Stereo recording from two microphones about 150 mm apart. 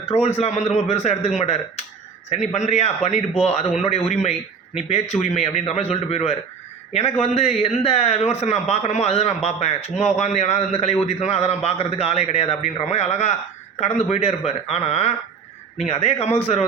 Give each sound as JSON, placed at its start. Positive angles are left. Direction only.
{"t": 0.0, "sound": "a man's voice", "side_deg": 45}